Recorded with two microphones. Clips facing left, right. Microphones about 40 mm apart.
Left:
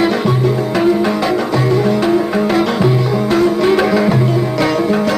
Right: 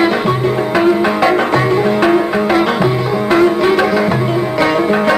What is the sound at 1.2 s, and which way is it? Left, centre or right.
Music, right.